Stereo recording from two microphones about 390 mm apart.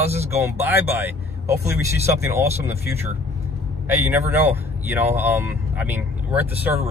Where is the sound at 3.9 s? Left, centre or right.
Centre.